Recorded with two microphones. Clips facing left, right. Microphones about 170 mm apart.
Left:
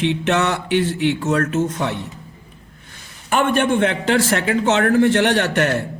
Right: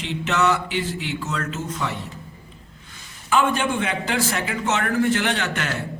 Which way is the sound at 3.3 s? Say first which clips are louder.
Left 4 dB; 65° left (ahead or behind).